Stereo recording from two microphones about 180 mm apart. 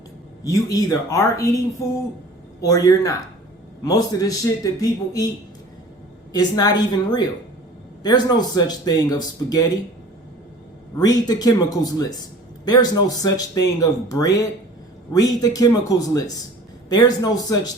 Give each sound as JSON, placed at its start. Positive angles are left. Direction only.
{"t": 0.4, "sound": "speech", "side_deg": 20}
{"t": 6.3, "sound": "speech", "side_deg": 20}
{"t": 10.9, "sound": "speech", "side_deg": 20}